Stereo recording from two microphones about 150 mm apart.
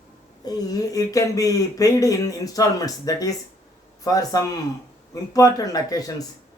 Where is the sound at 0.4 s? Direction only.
25° left (ahead or behind).